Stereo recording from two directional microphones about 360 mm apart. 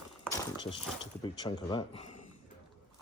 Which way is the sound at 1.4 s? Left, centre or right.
Centre.